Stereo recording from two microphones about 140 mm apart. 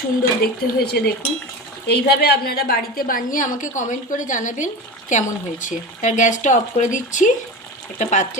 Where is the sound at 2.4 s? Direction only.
90° left.